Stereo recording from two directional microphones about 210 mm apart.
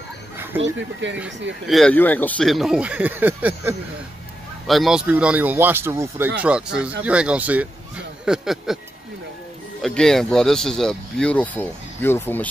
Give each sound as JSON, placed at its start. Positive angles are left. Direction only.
{"t": 0.5, "sound": "speech", "side_deg": -10}
{"t": 1.0, "sound": "speech", "side_deg": -60}
{"t": 1.7, "sound": "speech", "side_deg": 5}
{"t": 9.8, "sound": "speech", "side_deg": 0}